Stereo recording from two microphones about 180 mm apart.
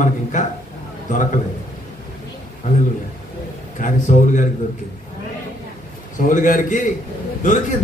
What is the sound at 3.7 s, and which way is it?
Speech, 45° left (ahead or behind).